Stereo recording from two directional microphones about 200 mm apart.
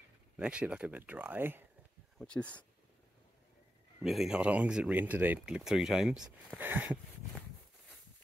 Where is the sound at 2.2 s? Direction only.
5° left (ahead or behind).